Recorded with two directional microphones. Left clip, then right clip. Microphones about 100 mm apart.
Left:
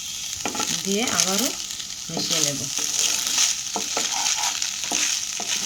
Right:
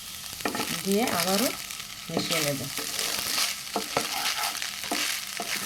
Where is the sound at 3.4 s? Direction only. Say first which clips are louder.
Left 5 dB; 40° right (ahead or behind).